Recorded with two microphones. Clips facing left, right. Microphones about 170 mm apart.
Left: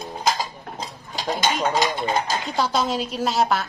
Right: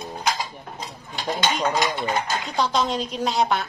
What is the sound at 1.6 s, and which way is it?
Speech, 30° left (ahead or behind).